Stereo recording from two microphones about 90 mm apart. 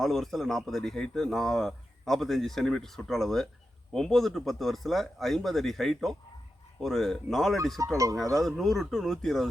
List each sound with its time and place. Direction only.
0.0 s speech: centre (ahead or behind)
7.8 s speech: 40° right (ahead or behind)
8.4 s speech: centre (ahead or behind)